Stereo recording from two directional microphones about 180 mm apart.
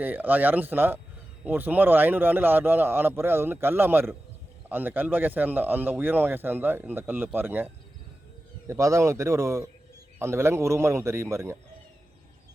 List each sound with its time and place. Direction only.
0.0 s speech: 10° right (ahead or behind)